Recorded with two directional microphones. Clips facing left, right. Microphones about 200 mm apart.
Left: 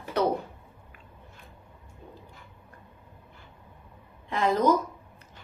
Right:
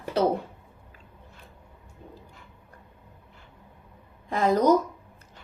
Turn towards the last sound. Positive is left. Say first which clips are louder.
# right 2 dB
turn(degrees=-40)  # may be behind; listen again after turning